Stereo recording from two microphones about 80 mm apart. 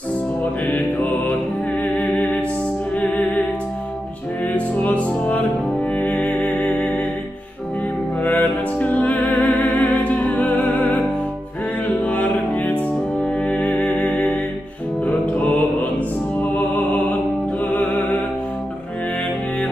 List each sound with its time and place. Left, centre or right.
1.0 s music: centre
4.5 s music: centre
6.1 s music: centre
8.3 s music: left
12.1 s music: centre
13.2 s music: centre
13.7 s music: centre
13.9 s music: centre
16.3 s music: left